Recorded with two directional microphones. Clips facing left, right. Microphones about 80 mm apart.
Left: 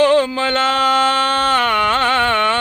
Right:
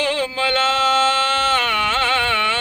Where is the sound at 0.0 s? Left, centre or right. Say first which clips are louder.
Left 7 dB; left.